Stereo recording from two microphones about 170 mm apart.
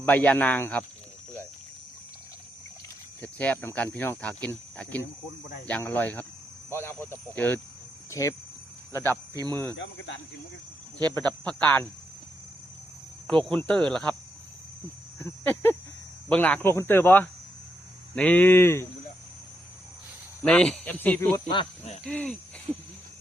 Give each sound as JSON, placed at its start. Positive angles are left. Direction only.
{"t": 0.0, "sound": "speech", "side_deg": 10}
{"t": 3.2, "sound": "speech", "side_deg": 10}
{"t": 9.3, "sound": "speech", "side_deg": -20}
{"t": 9.7, "sound": "speech", "side_deg": 90}
{"t": 11.0, "sound": "speech", "side_deg": 10}
{"t": 13.2, "sound": "cricket", "side_deg": 5}
{"t": 15.2, "sound": "speech", "side_deg": 15}
{"t": 20.4, "sound": "speech", "side_deg": 5}
{"t": 21.5, "sound": "speech", "side_deg": 30}
{"t": 22.0, "sound": "speech", "side_deg": 5}